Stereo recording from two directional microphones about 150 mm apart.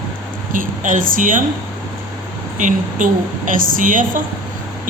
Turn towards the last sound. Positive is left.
turn(degrees=-60)  # may be behind; listen again after turning